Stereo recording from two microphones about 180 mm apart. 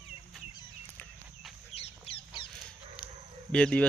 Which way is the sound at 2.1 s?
35° left (ahead or behind).